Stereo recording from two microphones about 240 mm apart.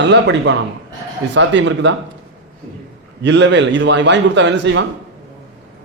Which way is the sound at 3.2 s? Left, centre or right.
Right.